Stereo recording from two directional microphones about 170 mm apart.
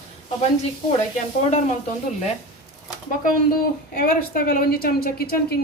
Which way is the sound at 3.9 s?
60° left (ahead or behind).